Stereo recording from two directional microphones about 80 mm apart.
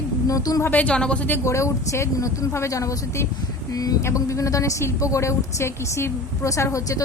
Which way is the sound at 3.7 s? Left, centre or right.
Left.